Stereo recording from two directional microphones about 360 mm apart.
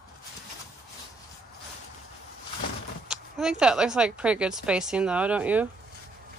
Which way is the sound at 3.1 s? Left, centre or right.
Centre.